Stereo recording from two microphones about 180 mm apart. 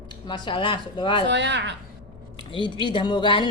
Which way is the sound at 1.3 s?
75° right (ahead or behind).